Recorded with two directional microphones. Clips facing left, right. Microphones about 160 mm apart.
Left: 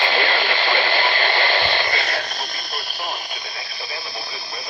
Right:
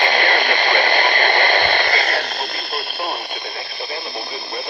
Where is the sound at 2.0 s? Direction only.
55° right (ahead or behind).